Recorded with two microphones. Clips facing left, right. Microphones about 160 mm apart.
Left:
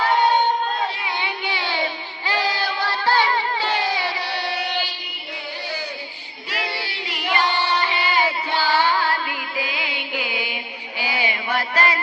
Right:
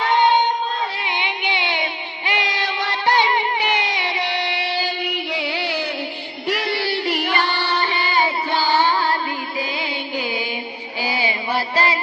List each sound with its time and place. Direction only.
1.0 s music: 20° right (ahead or behind)
5.0 s music: 85° right; by 7.6 s 65° right (ahead or behind)
8.2 s music: 20° right (ahead or behind)
9.7 s music: 40° right (ahead or behind)
10.2 s music: 15° left (ahead or behind)
11.0 s music: 35° right (ahead or behind)